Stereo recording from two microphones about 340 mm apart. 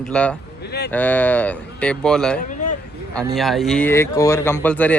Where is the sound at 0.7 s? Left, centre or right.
Left.